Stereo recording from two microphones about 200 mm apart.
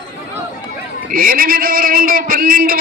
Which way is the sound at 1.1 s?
45° right (ahead or behind).